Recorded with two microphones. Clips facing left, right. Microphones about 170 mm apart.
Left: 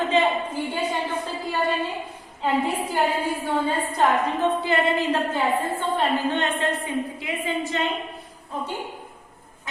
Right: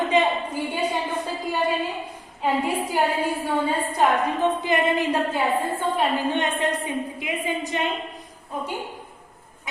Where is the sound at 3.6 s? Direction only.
10° right (ahead or behind).